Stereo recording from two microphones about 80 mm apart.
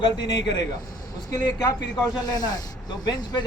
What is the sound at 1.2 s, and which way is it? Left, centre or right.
Speech, left.